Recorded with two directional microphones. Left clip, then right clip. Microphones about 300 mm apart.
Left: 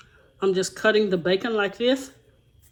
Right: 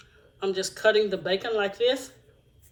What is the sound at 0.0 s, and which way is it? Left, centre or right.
Speech, centre.